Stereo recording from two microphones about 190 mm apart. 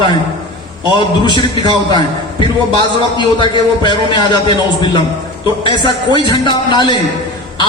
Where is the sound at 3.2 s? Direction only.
25° left (ahead or behind).